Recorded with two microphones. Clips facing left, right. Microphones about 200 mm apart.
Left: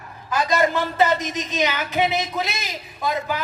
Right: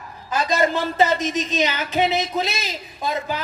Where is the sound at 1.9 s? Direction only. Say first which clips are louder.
Right 2 dB; 15° left (ahead or behind).